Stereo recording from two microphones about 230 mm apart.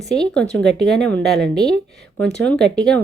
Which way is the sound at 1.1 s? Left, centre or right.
Centre.